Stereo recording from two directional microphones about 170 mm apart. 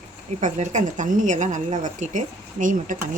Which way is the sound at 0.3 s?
45° right (ahead or behind).